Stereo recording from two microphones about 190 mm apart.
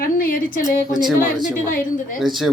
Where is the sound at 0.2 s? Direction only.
50° left (ahead or behind).